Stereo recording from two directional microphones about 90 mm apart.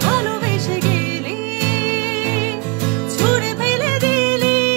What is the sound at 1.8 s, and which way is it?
Music, 25° right (ahead or behind).